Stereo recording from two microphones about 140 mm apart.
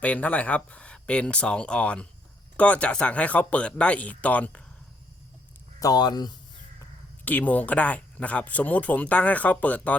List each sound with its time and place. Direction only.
0.0 s speech: 10° left (ahead or behind)
5.8 s speech: 30° left (ahead or behind)
7.3 s speech: 10° left (ahead or behind)